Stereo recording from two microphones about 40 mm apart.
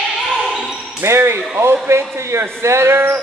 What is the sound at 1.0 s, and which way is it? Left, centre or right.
A man's voice, right.